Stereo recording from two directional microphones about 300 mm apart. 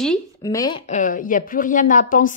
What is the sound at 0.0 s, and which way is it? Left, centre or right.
Speech, centre.